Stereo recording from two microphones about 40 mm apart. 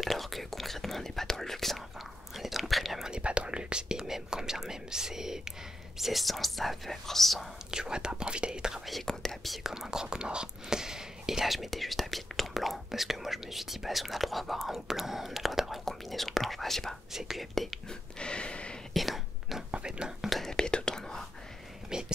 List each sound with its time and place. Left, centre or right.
0.0 s speech: centre
2.0 s speech: centre
3.2 s speech: right
3.9 s speech: centre
7.7 s speech: centre
8.7 s speech: centre
9.0 s speech: centre
9.6 s speech: centre
17.1 s speech: centre
17.8 s a sound: left
18.9 s speech: centre
19.9 s speech: centre
20.4 s whispering: centre
21.9 s speech: centre